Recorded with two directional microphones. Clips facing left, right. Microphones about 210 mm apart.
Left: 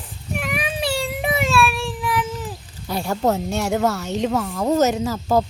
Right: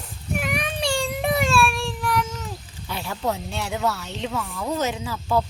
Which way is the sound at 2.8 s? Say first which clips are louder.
Left 6 dB; 45° left (ahead or behind).